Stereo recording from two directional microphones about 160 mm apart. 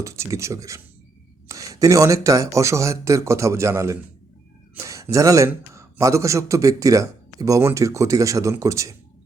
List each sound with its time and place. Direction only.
0.0 s speech: 20° right (ahead or behind)